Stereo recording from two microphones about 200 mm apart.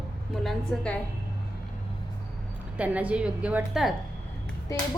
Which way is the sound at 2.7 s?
5° right (ahead or behind).